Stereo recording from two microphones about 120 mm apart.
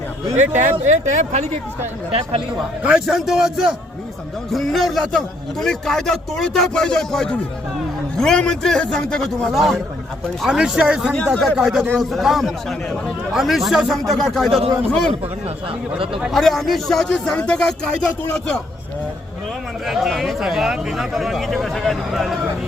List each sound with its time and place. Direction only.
0.3 s speech: 85° right
2.8 s a man's voice: 5° right (ahead or behind)
16.2 s a man's voice: centre (ahead or behind)
19.8 s a man's voice: centre (ahead or behind)